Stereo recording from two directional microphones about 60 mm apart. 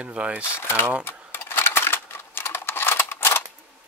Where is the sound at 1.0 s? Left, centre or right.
Left.